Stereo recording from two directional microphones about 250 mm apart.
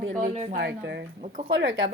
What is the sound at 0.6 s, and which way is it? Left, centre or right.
Speech, right.